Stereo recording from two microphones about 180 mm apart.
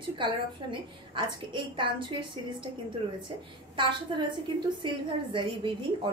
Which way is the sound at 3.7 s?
25° right (ahead or behind).